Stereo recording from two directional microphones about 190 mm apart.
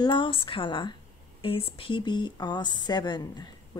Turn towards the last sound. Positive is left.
turn(degrees=20)  # may be behind; listen again after turning